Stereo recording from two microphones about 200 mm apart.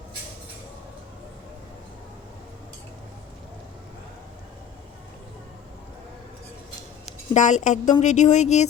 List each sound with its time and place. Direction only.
7.3 s a woman's voice: 35° left (ahead or behind)